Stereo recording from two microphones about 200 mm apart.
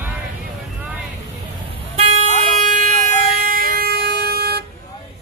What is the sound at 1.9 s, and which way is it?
Vehicle, 35° right (ahead or behind).